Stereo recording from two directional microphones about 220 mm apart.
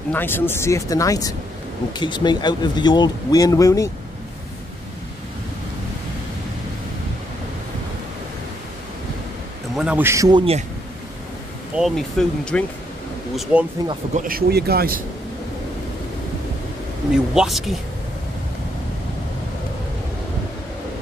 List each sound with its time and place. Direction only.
0.1 s speech: 10° left (ahead or behind)
9.8 s a man's voice: 5° right (ahead or behind); by 10.6 s 25° right (ahead or behind)
11.7 s speech: centre (ahead or behind)
13.8 s a man's voice: 15° right (ahead or behind)
14.1 s speech: 40° right (ahead or behind)
17.1 s speech: centre (ahead or behind)